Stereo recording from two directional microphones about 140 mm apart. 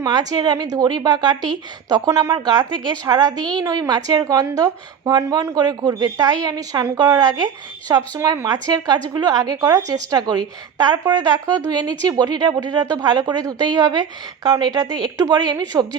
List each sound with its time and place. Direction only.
0.0 s a woman's voice: 25° right (ahead or behind)
11.4 s a woman's voice: 30° right (ahead or behind)